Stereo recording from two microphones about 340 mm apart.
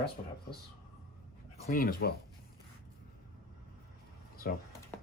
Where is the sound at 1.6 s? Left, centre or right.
Left.